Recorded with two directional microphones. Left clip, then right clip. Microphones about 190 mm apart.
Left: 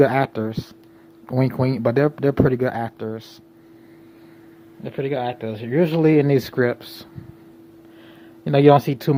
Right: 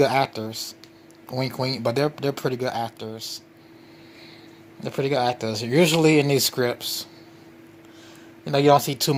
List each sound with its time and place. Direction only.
0.0 s speech: 15° left (ahead or behind)
4.8 s speech: 10° right (ahead or behind)
5.9 s speech: 5° left (ahead or behind)
8.4 s speech: 25° left (ahead or behind)